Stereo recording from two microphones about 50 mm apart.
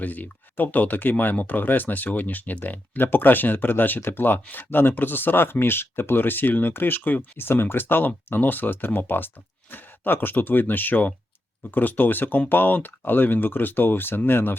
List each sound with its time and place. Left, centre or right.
0.0 s speech: left